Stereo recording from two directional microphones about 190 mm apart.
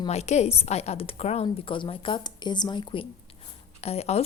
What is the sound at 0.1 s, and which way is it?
A woman's voice, 35° left (ahead or behind).